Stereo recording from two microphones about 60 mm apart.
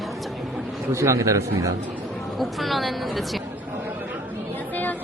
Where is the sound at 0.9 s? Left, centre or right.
Right.